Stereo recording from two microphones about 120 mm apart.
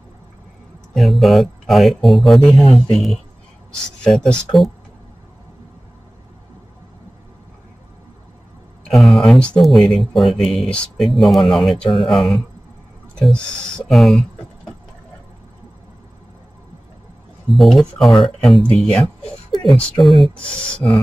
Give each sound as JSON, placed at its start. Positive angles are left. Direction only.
{"t": 0.9, "sound": "speech", "side_deg": 0}
{"t": 8.8, "sound": "speech", "side_deg": 0}
{"t": 17.5, "sound": "speech", "side_deg": 0}
{"t": 20.8, "sound": "beatboxing", "side_deg": 20}